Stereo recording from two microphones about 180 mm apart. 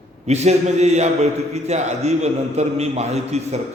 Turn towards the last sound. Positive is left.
turn(degrees=-35)  # may be behind; listen again after turning